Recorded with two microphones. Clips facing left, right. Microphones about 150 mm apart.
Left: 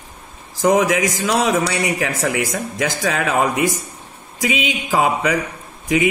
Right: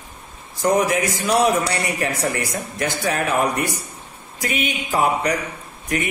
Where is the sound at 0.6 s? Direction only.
90° left.